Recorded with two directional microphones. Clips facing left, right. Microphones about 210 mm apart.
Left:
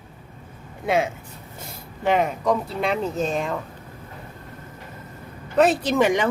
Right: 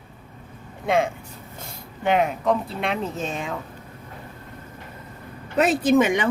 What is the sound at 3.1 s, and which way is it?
Speech, 35° left (ahead or behind).